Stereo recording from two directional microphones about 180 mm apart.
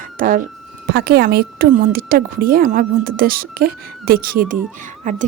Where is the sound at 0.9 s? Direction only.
60° right (ahead or behind).